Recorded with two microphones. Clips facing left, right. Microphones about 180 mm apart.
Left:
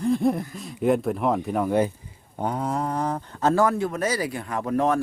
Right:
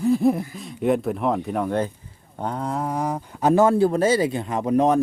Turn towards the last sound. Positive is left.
turn(degrees=-20)  # may be behind; listen again after turning